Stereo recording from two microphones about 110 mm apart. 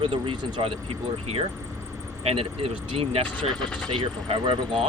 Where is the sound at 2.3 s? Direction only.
60° right (ahead or behind).